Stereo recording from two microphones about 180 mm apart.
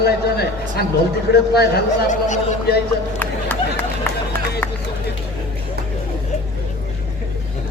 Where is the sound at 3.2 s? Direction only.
10° left (ahead or behind).